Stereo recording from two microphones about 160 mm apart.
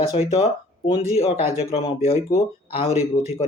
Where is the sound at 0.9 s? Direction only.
40° left (ahead or behind).